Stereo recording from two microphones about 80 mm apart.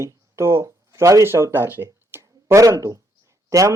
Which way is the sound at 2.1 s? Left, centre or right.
Right.